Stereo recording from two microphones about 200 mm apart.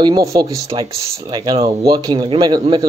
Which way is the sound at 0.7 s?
30° right (ahead or behind).